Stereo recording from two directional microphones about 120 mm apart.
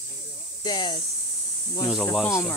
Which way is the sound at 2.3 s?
25° left (ahead or behind).